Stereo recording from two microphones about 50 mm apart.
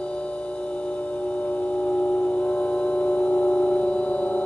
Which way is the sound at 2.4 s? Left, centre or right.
Left.